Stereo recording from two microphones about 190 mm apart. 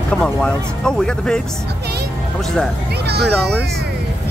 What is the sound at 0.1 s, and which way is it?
Speech, 5° left (ahead or behind).